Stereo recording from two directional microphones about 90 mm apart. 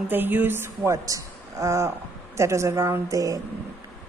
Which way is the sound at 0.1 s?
20° right (ahead or behind).